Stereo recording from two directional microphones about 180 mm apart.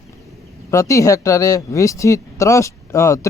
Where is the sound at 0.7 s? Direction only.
15° left (ahead or behind).